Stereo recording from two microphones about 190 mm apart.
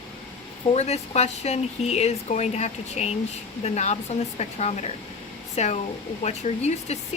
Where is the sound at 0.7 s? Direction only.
35° left (ahead or behind).